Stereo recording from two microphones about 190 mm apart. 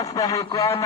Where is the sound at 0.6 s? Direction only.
30° left (ahead or behind).